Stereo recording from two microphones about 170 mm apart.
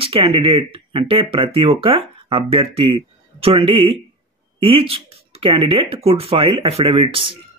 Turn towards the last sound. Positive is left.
turn(degrees=-30)  # may be behind; listen again after turning